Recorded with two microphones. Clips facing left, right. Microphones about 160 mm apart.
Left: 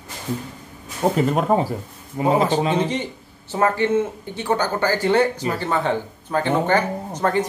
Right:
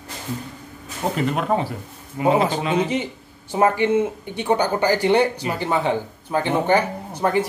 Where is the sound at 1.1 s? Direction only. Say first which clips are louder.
Left 2 dB; 40° left (ahead or behind).